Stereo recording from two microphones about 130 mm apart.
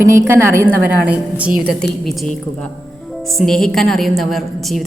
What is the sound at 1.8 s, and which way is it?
A woman's voice, 5° left (ahead or behind).